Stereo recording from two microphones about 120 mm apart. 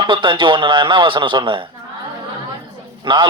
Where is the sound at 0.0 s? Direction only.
40° right (ahead or behind).